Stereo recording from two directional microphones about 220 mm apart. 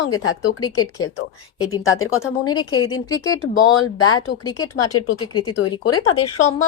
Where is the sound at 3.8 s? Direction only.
75° left (ahead or behind).